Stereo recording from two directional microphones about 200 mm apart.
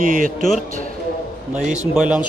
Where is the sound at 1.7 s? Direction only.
5° right (ahead or behind).